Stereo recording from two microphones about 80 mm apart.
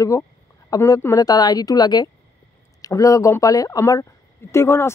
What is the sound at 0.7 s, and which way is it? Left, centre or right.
A woman's voice, left.